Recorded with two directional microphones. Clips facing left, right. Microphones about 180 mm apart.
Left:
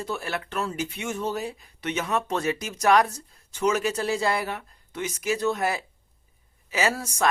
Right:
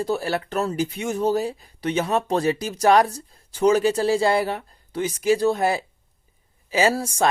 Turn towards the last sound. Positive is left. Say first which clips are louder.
# right 5 dB
turn(degrees=-30)  # may be behind; listen again after turning